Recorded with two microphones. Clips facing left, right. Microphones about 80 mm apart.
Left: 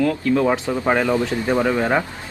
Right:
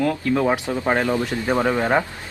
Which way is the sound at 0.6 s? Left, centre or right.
Left.